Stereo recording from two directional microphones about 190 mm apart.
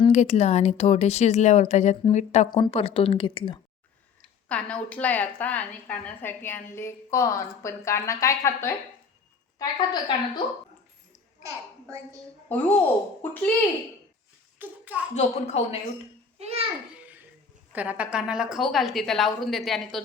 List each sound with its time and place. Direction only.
0.0 s speech: 35° left (ahead or behind)
4.4 s a woman's voice: 5° left (ahead or behind); by 10.4 s 25° left (ahead or behind)
12.5 s a woman's voice: 10° left (ahead or behind)
14.6 s a child's voice: 10° right (ahead or behind)
15.1 s speech: 35° left (ahead or behind)
16.4 s a child's voice: 30° right (ahead or behind)
16.9 s babbling: 10° right (ahead or behind)
17.7 s a woman's voice: 10° right (ahead or behind)